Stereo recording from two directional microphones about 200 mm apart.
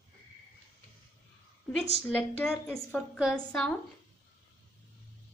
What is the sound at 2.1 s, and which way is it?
A woman's voice, 5° left (ahead or behind).